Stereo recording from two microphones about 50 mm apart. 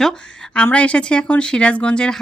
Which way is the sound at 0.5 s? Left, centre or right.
Left.